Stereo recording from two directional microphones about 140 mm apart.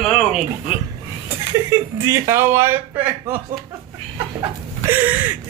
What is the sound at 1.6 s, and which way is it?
Speech, 20° right (ahead or behind).